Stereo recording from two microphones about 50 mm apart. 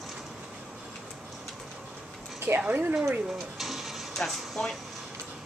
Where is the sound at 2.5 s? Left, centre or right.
Right.